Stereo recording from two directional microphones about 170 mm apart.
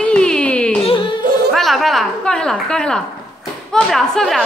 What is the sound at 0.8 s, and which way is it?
Yodeling, 30° left (ahead or behind).